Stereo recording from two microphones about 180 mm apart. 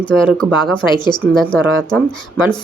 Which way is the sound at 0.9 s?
25° left (ahead or behind).